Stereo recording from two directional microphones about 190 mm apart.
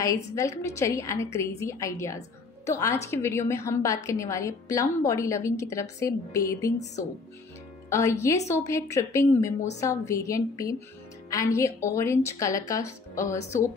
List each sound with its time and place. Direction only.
0.0 s a woman's voice: 15° left (ahead or behind)
7.9 s a woman's voice: 15° left (ahead or behind)